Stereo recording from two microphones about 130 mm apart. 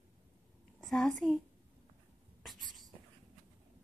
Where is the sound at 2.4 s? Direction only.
Centre (ahead or behind).